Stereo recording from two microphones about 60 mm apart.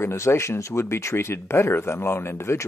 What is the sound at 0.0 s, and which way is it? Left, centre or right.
Speech, left.